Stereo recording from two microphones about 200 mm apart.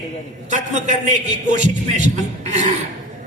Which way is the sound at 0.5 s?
35° right (ahead or behind).